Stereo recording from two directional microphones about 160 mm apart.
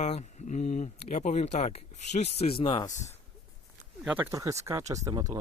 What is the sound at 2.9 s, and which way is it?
Speech, 45° left (ahead or behind).